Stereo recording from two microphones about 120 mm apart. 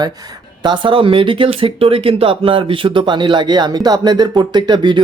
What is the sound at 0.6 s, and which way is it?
Speech, 40° right (ahead or behind).